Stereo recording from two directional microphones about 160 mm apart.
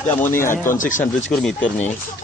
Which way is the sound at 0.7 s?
55° left (ahead or behind).